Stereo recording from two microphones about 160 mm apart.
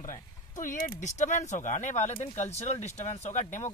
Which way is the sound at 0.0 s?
55° left (ahead or behind).